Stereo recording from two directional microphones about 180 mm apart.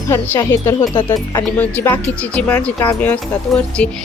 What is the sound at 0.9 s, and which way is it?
Speech, 30° left (ahead or behind).